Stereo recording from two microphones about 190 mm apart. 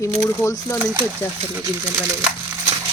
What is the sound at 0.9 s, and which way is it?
Speech, 15° right (ahead or behind).